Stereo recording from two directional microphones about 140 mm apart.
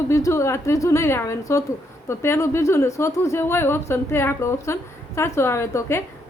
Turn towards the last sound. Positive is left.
turn(degrees=20)  # may be behind; listen again after turning